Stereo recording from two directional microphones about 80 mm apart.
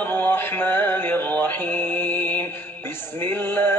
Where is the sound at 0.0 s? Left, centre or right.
Left.